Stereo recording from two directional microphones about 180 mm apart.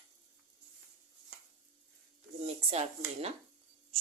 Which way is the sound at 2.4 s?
35° right (ahead or behind).